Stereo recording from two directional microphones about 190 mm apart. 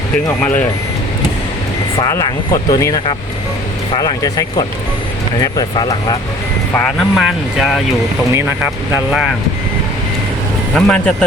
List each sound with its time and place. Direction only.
2.0 s speech: 15° left (ahead or behind)
6.7 s speech: centre (ahead or behind)
8.3 s speech: 15° right (ahead or behind)
10.8 s speech: 5° left (ahead or behind)